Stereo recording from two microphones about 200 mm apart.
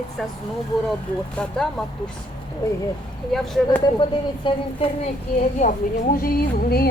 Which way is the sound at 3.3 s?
Centre (ahead or behind).